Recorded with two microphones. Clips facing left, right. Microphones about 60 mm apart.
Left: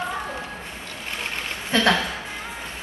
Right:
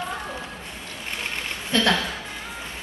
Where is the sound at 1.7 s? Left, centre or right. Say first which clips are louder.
Left 2 dB; centre.